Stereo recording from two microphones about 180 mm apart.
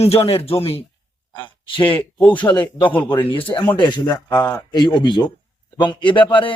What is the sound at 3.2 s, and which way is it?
A man's voice, 30° left (ahead or behind).